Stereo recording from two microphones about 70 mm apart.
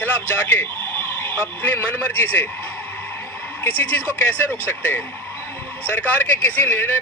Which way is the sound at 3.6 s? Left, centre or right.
Left.